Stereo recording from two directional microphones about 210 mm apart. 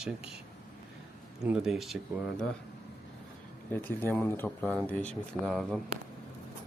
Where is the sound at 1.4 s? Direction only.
5° right (ahead or behind).